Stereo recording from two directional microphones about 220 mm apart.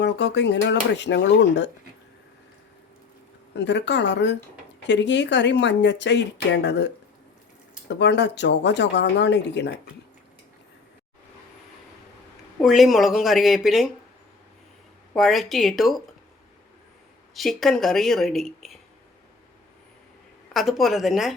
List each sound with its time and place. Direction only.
0.0 s speech: 50° left (ahead or behind)
3.5 s speech: 50° left (ahead or behind)
12.6 s a woman's voice: centre (ahead or behind)
15.1 s a woman's voice: centre (ahead or behind)
17.3 s a woman's voice: centre (ahead or behind)
20.5 s a woman's voice: centre (ahead or behind)